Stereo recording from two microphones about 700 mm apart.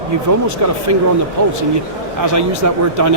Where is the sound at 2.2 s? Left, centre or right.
Right.